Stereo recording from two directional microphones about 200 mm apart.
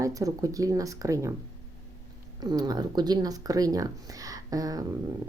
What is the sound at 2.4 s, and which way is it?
Speech, 20° right (ahead or behind).